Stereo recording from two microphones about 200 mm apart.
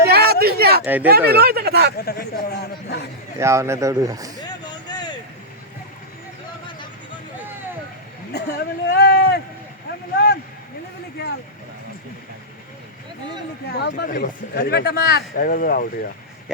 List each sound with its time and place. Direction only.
0.1 s a sound: 50° right (ahead or behind)
0.9 s speech: 10° right (ahead or behind)
1.3 s speech: 50° right (ahead or behind)
2.0 s a man's voice: 55° left (ahead or behind)
3.3 s speech: 15° right (ahead or behind)
4.4 s vehicle: 20° left (ahead or behind)
8.3 s speech: 55° left (ahead or behind)
10.2 s a sound: 55° left (ahead or behind)
11.2 s vehicle: 55° left (ahead or behind)
13.7 s a man's voice: 55° left (ahead or behind)
14.1 s a man's voice: 45° left (ahead or behind)